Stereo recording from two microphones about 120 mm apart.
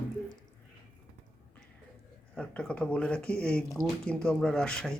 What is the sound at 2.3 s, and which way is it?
Speech, 10° left (ahead or behind).